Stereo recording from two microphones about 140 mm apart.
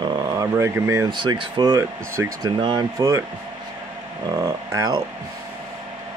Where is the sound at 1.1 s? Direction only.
35° right (ahead or behind).